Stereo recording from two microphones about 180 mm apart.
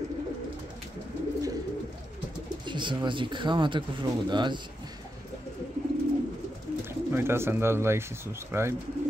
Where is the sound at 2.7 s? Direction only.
25° right (ahead or behind).